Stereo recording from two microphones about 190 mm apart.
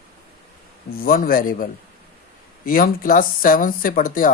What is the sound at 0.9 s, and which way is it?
A man's voice, 50° left (ahead or behind).